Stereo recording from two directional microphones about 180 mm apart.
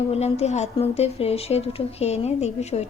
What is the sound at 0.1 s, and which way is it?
A woman's voice, 35° left (ahead or behind).